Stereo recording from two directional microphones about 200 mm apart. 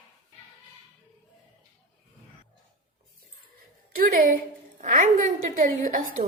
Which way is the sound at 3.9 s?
45° right (ahead or behind).